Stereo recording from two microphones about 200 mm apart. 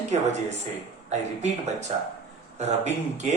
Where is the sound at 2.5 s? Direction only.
35° right (ahead or behind).